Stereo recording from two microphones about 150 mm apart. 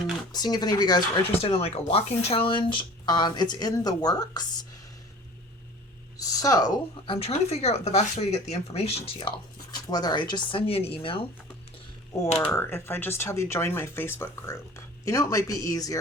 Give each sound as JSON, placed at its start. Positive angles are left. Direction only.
{"t": 0.3, "sound": "a woman's voice", "side_deg": 25}
{"t": 1.3, "sound": "speech", "side_deg": 40}
{"t": 6.1, "sound": "a woman's voice", "side_deg": 25}
{"t": 7.2, "sound": "speech", "side_deg": 45}
{"t": 9.7, "sound": "speech", "side_deg": 25}
{"t": 12.4, "sound": "a woman's voice", "side_deg": 15}